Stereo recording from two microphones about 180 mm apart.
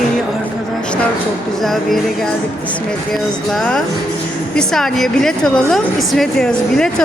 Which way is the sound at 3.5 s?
5° left (ahead or behind).